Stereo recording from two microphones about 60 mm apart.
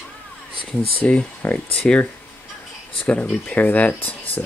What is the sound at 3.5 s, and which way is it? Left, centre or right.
Speech, left.